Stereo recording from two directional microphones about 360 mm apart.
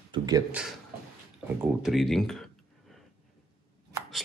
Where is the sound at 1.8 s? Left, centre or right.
Centre.